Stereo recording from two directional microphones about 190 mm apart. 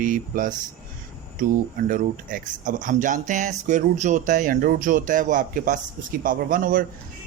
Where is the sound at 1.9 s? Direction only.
45° right (ahead or behind).